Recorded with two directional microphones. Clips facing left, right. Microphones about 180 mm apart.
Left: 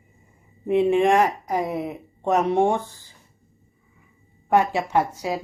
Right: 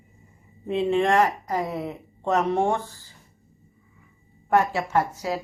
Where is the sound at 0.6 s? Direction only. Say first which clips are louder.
Left 4 dB; 15° left (ahead or behind).